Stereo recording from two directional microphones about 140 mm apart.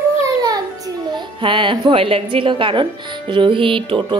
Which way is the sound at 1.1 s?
35° right (ahead or behind).